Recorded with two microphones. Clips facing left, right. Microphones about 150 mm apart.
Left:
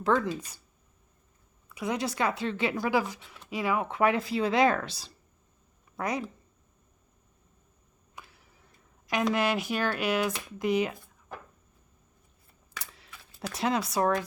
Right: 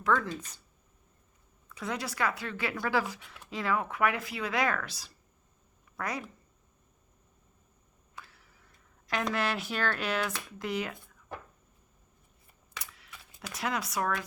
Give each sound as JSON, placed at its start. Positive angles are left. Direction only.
{"t": 0.0, "sound": "speech", "side_deg": 30}
{"t": 0.3, "sound": "speech", "side_deg": 10}
{"t": 1.7, "sound": "a woman's voice", "side_deg": 15}
{"t": 3.8, "sound": "a woman's voice", "side_deg": 25}
{"t": 8.1, "sound": "a sound", "side_deg": 15}
{"t": 9.3, "sound": "speech", "side_deg": 15}
{"t": 12.8, "sound": "a sound", "side_deg": 30}
{"t": 13.5, "sound": "a woman's voice", "side_deg": 25}